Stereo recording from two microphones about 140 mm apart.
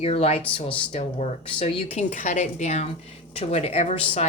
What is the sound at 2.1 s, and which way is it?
Speech, 60° left (ahead or behind).